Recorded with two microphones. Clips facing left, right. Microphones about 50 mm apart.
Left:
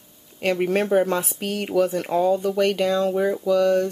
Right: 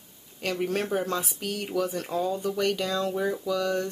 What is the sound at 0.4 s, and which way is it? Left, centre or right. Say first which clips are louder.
Speech: left 7 dB; left.